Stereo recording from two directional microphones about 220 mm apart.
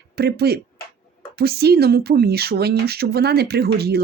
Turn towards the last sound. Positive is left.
turn(degrees=-45)  # may be behind; listen again after turning